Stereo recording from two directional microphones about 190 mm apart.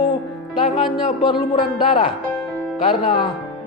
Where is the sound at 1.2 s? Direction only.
25° left (ahead or behind).